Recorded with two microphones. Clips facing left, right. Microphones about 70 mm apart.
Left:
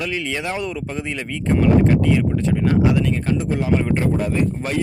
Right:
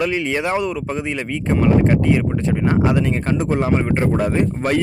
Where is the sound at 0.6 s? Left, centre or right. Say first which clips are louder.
Right 3 dB; centre; by 3.4 s right.